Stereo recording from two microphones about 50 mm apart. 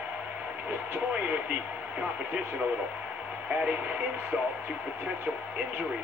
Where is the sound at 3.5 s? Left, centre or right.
Right.